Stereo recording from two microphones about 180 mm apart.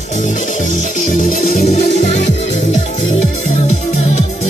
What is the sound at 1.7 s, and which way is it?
Music, 40° left (ahead or behind).